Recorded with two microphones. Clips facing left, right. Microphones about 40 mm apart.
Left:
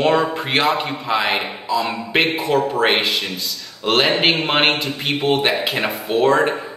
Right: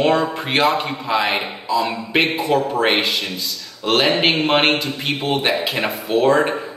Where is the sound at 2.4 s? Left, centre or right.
Left.